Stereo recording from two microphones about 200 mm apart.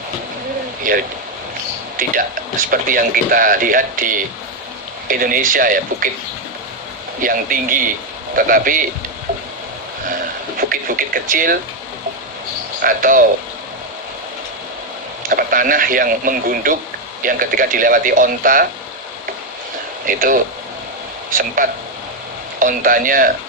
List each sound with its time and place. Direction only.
0.9 s a man's voice: 40° right (ahead or behind)
7.2 s a man's voice: 45° right (ahead or behind)
10.6 s a sound: 45° right (ahead or behind)
12.8 s a man's voice: 45° right (ahead or behind)
15.3 s a man's voice: 45° right (ahead or behind)
20.1 s a man's voice: 45° right (ahead or behind)